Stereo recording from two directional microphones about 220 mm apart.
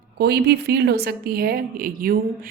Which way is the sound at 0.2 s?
45° right (ahead or behind).